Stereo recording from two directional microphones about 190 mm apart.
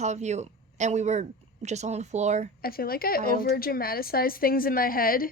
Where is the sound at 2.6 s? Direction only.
50° left (ahead or behind).